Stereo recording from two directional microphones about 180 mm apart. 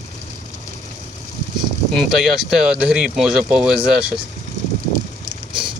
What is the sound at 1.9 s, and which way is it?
Speech, centre (ahead or behind).